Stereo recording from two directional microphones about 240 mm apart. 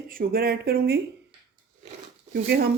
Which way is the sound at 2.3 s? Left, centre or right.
Right.